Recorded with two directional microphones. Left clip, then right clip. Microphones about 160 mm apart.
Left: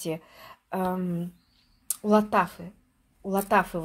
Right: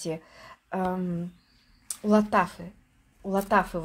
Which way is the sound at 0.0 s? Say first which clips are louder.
Left 1 dB; 15° left (ahead or behind).